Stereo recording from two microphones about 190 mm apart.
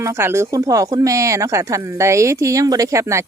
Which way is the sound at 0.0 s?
15° right (ahead or behind).